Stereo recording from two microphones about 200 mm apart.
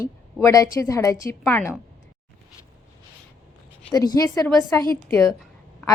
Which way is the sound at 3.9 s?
15° left (ahead or behind).